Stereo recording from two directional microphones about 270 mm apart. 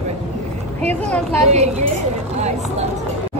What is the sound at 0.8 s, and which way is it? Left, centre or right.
Speech, centre.